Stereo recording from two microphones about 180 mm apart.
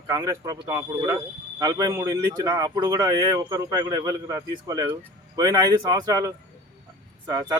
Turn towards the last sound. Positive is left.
turn(degrees=-20)  # may be behind; listen again after turning